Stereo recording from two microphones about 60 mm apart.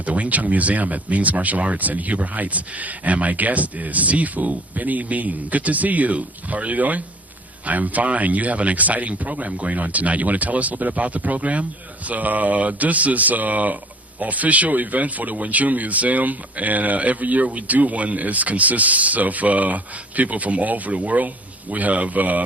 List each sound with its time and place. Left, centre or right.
0.0 s speech: right